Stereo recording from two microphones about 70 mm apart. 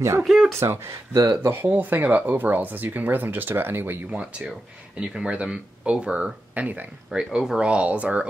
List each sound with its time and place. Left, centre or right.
0.2 s speech: centre
0.6 s speech: right
1.4 s speech: right
4.2 s speech: centre
7.1 s speech: centre